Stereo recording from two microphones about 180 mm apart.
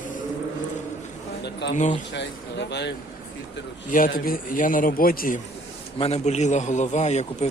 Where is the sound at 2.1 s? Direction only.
75° left (ahead or behind).